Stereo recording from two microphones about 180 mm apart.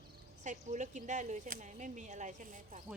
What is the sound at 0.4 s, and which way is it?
Speech, 45° right (ahead or behind).